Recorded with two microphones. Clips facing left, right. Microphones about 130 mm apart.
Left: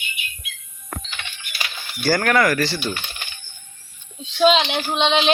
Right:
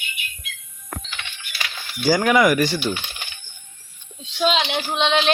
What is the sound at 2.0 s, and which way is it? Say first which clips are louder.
Coin: right 2 dB; 10° right (ahead or behind).